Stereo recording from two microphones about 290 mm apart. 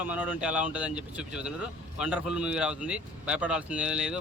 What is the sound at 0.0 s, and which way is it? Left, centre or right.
Speech, centre.